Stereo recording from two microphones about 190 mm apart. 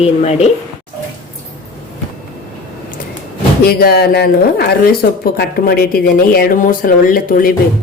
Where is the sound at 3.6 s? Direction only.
55° left (ahead or behind).